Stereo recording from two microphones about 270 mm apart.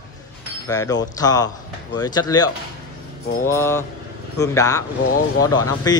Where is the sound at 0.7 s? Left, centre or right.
Centre.